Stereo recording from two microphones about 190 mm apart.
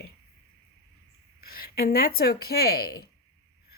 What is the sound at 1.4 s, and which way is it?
A woman's voice, 55° left (ahead or behind).